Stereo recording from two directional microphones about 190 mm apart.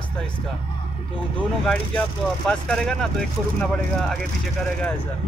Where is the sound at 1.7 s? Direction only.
5° left (ahead or behind).